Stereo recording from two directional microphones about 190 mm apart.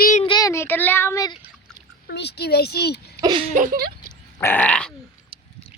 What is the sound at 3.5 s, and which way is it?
Speech, 45° right (ahead or behind).